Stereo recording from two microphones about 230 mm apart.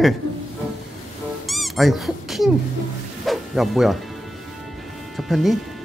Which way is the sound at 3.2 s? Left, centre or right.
Centre.